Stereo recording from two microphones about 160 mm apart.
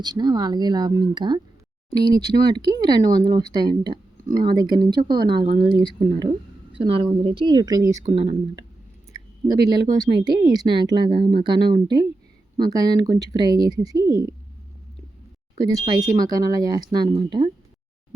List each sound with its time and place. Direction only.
0.0 s speech: 25° right (ahead or behind)
8.1 s speech: 30° right (ahead or behind)
15.8 s speech: 25° right (ahead or behind)